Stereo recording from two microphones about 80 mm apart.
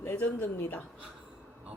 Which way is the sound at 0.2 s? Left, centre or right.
Left.